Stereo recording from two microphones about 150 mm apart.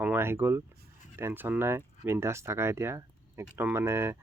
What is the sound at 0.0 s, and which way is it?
Speech, 15° right (ahead or behind).